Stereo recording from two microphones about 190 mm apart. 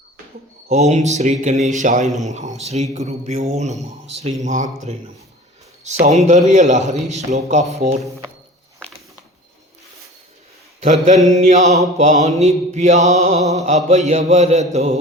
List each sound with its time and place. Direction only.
0.7 s mantra: 35° right (ahead or behind)
6.1 s mantra: 35° right (ahead or behind)
10.8 s mantra: 40° right (ahead or behind)